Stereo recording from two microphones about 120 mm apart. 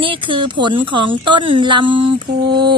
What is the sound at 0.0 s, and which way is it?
Speech, 45° right (ahead or behind).